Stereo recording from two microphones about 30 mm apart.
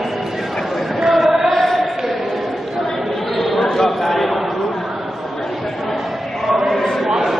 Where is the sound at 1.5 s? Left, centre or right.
Centre.